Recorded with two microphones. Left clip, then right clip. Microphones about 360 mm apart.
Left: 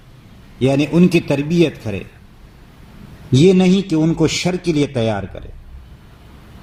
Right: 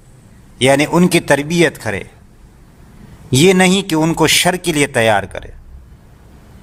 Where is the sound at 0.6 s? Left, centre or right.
Right.